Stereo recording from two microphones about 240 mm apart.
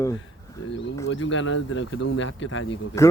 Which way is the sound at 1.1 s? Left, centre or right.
Left.